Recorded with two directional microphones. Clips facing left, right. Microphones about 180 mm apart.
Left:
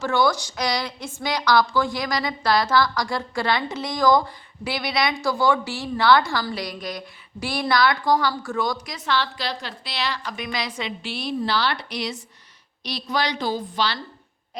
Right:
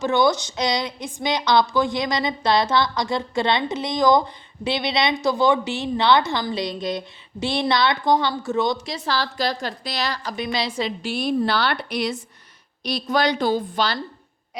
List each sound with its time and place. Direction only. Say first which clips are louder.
0.0 s a woman's voice: right 2 dB; 20° right (ahead or behind)
9.0 s a woman's voice: right 1 dB; 40° right (ahead or behind)